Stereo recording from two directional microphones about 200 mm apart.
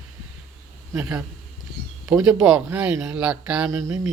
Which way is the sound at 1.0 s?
5° right (ahead or behind).